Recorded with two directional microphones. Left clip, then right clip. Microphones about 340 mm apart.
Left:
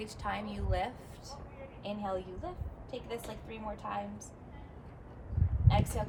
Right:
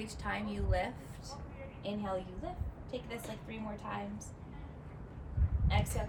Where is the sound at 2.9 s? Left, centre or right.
Centre.